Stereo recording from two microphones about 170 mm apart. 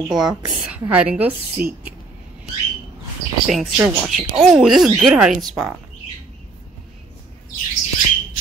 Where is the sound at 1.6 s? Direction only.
55° right (ahead or behind).